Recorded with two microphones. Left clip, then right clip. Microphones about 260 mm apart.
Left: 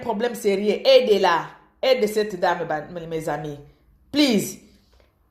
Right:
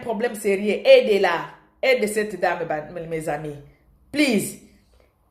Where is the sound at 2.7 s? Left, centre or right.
Left.